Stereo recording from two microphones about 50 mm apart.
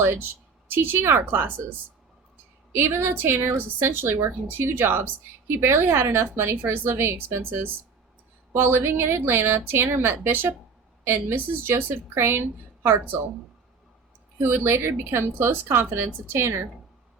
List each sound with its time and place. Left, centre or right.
0.0 s a woman's voice: right
2.7 s a woman's voice: right
9.4 s a woman's voice: right
14.5 s a woman's voice: right